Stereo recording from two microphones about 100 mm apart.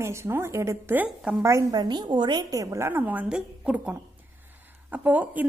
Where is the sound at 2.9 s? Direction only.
15° right (ahead or behind).